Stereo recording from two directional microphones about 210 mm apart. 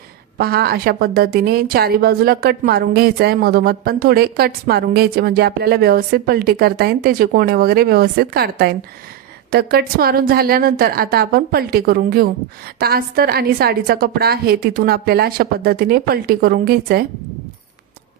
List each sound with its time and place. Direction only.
0.3 s a woman's voice: 50° right (ahead or behind)